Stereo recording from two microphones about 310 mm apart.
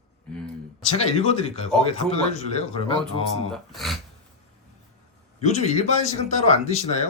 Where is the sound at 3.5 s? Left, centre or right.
Centre.